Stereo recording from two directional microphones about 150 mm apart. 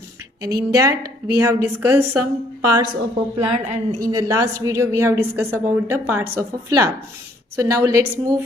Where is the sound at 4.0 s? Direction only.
25° right (ahead or behind).